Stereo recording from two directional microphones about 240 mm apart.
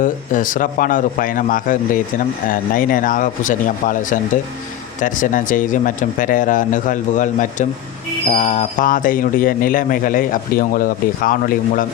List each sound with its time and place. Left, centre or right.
0.0 s a man's voice: left